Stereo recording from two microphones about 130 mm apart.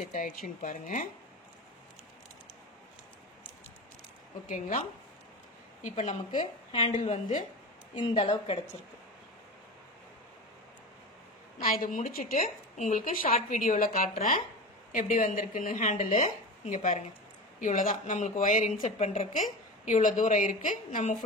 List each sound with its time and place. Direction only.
0.0 s a woman's voice: 85° left
4.5 s speech: 75° left (ahead or behind)
5.9 s speech: 70° left (ahead or behind)
6.3 s a woman's voice: 40° left (ahead or behind)
7.0 s speech: 70° left (ahead or behind)
7.9 s speech: 40° left (ahead or behind)
11.5 s a woman's voice: 90° left
13.3 s a woman's voice: 70° left (ahead or behind)
17.6 s speech: 90° left; by 19.4 s 55° left (ahead or behind)
19.8 s speech: 80° left